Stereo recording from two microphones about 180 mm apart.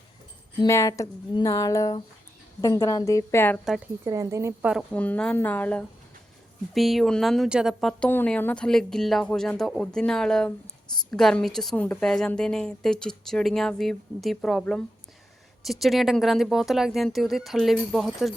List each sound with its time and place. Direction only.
0.6 s speech: 20° left (ahead or behind)
4.0 s speech: 15° right (ahead or behind)
4.7 s speech: centre (ahead or behind)